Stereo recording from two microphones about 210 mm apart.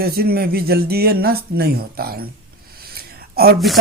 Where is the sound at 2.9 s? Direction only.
45° right (ahead or behind).